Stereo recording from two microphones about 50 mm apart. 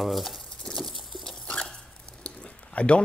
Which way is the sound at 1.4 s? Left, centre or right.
Centre.